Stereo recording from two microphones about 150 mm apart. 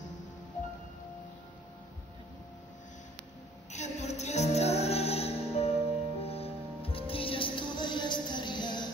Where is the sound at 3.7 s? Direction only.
50° left (ahead or behind).